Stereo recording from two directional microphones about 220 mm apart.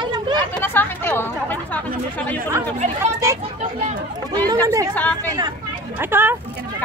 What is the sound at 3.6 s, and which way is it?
Speech, 35° right (ahead or behind).